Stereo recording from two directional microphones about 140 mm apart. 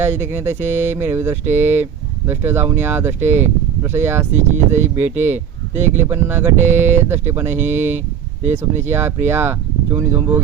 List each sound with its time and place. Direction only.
0.2 s speech: 20° right (ahead or behind)
4.3 s speech: 55° right (ahead or behind)
5.1 s speech: 15° right (ahead or behind)